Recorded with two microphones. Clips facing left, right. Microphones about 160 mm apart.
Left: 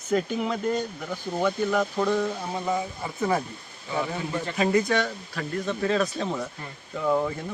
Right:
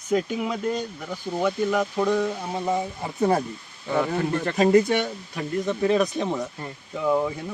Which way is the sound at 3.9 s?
55° right (ahead or behind).